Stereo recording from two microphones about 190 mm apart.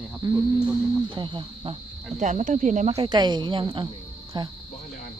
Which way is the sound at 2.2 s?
40° right (ahead or behind).